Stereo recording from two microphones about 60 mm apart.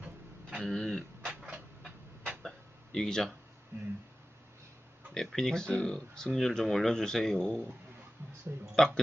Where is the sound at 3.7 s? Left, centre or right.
Right.